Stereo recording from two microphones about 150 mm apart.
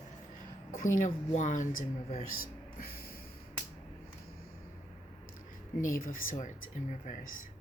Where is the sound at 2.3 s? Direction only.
85° left.